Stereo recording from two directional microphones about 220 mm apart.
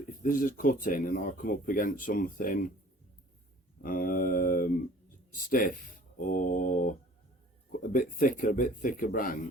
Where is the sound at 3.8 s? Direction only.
40° left (ahead or behind).